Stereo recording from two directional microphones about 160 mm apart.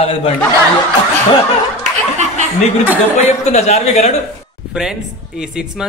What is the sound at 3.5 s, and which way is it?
Speech, 45° left (ahead or behind).